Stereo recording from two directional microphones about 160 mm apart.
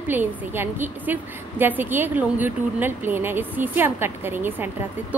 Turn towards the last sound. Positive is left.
turn(degrees=-15)  # may be behind; listen again after turning